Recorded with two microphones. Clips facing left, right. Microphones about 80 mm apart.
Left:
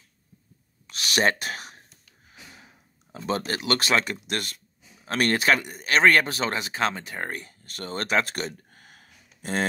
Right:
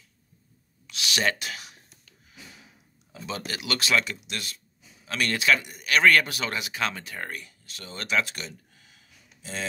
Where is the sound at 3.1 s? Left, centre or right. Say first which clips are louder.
Left 7 dB; left.